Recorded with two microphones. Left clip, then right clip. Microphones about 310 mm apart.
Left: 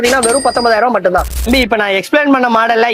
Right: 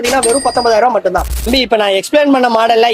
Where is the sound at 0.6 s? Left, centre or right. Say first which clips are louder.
Right 2 dB; left.